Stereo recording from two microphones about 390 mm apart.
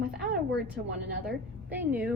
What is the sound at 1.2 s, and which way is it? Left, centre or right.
Speech, centre.